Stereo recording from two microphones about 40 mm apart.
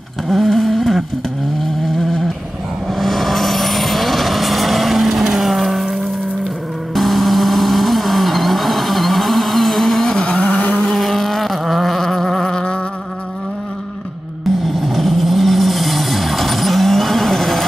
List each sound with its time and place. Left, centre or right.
0.3 s a sound: centre
2.9 s vehicle: centre
6.9 s vehicle: centre
10.2 s vehicle: left
11.0 s vehicle: centre
12.4 s a sound: left
14.7 s vehicle: centre